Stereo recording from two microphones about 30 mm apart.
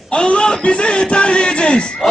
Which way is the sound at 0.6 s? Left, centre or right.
Left.